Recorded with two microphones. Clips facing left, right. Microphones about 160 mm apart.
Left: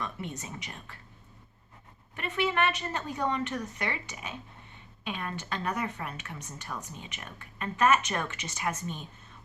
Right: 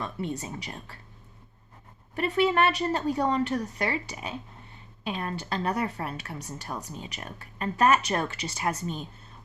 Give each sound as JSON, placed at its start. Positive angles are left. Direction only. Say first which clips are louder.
{"t": 0.0, "sound": "a woman's voice", "louder": "right 5 dB", "side_deg": -35}
{"t": 2.1, "sound": "a woman's voice", "louder": "right 6 dB", "side_deg": -35}